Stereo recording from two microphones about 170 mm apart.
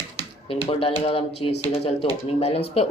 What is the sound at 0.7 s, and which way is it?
Speech, 35° left (ahead or behind).